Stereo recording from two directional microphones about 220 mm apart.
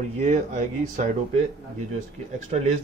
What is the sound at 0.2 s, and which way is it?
Speech, 35° right (ahead or behind).